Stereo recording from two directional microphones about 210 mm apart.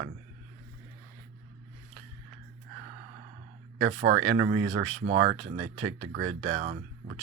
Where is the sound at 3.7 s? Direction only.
60° right (ahead or behind).